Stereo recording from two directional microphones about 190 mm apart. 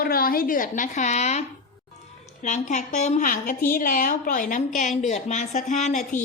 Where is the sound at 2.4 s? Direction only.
40° left (ahead or behind).